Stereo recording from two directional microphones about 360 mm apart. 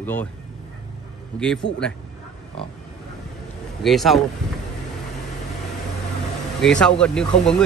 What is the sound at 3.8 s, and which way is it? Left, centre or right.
Speech, centre.